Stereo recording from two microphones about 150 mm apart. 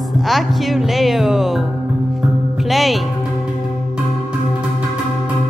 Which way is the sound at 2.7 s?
Centre (ahead or behind).